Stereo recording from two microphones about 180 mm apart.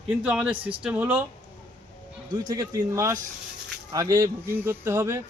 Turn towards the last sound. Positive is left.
turn(degrees=-15)  # may be behind; listen again after turning